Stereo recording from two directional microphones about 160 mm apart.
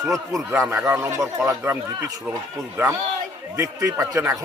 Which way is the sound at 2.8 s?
10° right (ahead or behind).